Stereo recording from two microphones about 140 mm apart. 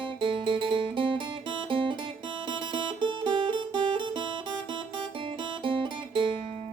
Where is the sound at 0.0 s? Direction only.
35° right (ahead or behind).